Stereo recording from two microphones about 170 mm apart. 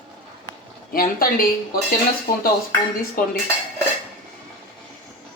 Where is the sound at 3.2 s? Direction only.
55° left (ahead or behind).